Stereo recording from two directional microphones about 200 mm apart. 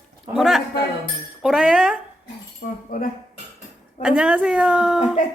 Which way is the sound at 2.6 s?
50° left (ahead or behind).